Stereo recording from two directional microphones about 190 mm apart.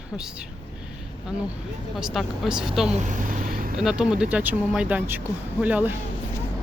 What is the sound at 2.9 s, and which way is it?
Vehicle, 40° right (ahead or behind).